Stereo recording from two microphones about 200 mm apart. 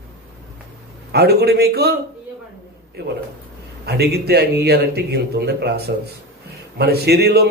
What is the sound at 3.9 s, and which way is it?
A man's voice, 55° right (ahead or behind).